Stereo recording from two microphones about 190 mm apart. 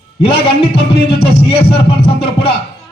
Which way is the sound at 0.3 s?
30° left (ahead or behind).